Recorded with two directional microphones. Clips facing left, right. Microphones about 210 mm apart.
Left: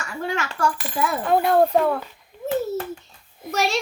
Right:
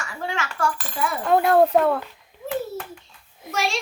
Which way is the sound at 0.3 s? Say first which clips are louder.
Left 2 dB; 40° left (ahead or behind).